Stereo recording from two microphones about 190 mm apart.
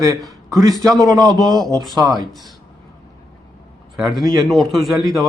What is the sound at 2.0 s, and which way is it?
Speech, 20° right (ahead or behind).